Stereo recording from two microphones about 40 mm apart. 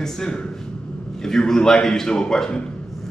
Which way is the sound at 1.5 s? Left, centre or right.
Centre.